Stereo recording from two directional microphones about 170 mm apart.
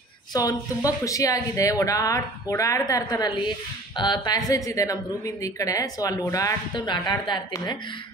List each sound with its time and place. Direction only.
0.3 s speech: 20° left (ahead or behind)